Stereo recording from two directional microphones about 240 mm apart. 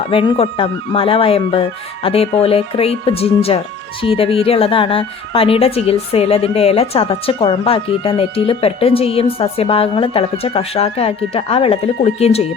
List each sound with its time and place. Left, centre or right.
0.1 s speech: left